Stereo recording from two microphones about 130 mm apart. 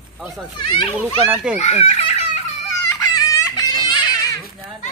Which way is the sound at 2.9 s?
25° left (ahead or behind).